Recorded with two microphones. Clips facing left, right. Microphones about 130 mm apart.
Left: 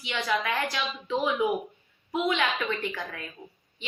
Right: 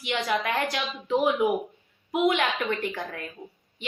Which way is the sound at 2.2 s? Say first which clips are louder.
Right 3 dB; 45° right (ahead or behind).